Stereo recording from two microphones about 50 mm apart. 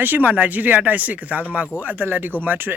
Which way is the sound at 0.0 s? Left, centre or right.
Right.